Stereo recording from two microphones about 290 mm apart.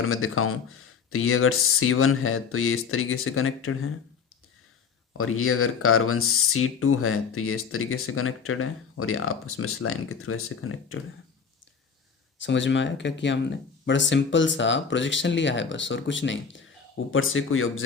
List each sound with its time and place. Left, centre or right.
0.0 s speech: left
5.1 s speech: left
12.4 s speech: left